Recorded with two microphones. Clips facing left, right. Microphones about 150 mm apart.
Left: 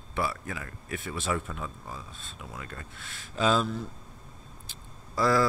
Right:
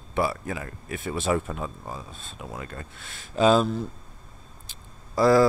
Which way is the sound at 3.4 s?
20° right (ahead or behind).